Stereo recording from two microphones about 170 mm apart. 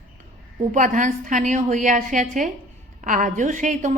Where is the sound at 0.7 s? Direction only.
50° right (ahead or behind).